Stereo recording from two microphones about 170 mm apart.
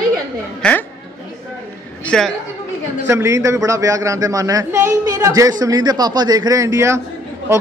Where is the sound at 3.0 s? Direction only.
15° right (ahead or behind).